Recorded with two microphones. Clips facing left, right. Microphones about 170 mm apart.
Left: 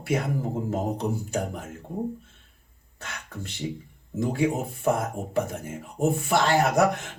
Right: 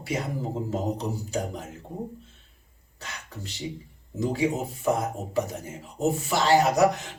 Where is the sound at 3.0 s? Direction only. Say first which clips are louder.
Left 2 dB; 55° left (ahead or behind).